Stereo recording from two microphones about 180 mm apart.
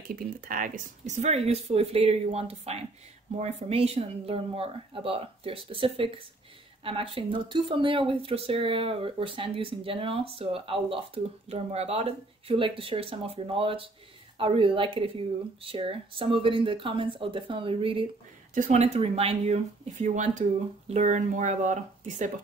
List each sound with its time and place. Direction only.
0.1 s speech: 50° right (ahead or behind); by 18.0 s 30° right (ahead or behind)
18.5 s speech: 45° right (ahead or behind)